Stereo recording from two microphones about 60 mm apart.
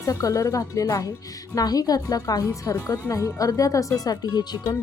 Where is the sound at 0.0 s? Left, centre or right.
Left.